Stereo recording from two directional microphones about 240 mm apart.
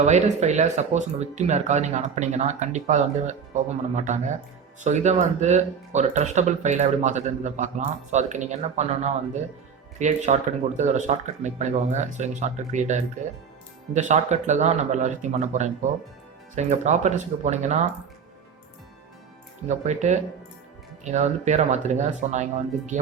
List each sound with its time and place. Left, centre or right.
0.0 s speech: right
19.6 s speech: right